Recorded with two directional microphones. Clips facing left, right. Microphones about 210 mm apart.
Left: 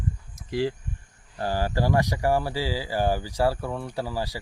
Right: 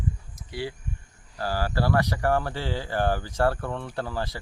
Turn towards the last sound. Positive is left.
turn(degrees=10)  # may be behind; listen again after turning